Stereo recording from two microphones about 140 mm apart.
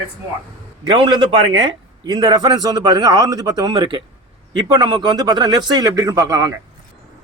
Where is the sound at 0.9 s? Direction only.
35° right (ahead or behind).